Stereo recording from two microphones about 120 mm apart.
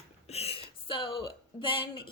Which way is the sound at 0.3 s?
55° left (ahead or behind).